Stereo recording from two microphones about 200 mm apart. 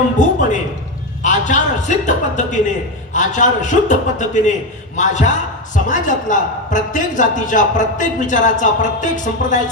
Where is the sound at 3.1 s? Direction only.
40° left (ahead or behind).